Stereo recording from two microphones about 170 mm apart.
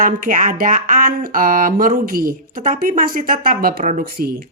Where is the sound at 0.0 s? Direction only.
50° right (ahead or behind).